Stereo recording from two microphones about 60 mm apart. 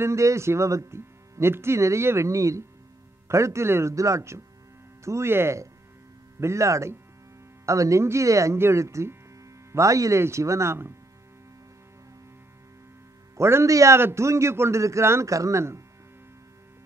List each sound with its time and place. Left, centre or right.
0.0 s speech: right
3.9 s speech: right
8.5 s speech: right
13.4 s speech: right
13.7 s speech: right
13.9 s speech: right